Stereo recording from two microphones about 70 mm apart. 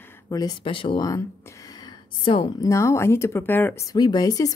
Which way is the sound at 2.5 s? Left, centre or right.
Left.